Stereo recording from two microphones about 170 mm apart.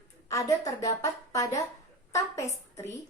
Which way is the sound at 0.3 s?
20° left (ahead or behind).